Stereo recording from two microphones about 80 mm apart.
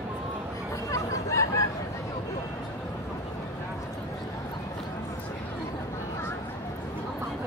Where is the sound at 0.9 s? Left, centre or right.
Left.